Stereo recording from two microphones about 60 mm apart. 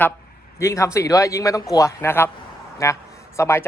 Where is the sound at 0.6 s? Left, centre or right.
Left.